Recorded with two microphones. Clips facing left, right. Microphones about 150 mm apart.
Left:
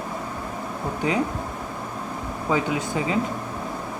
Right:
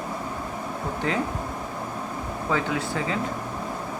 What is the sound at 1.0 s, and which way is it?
Speech, 15° left (ahead or behind).